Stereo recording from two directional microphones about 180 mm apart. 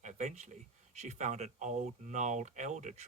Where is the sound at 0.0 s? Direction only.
40° right (ahead or behind).